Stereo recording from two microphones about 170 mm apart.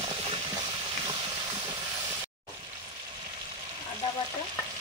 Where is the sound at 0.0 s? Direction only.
35° right (ahead or behind).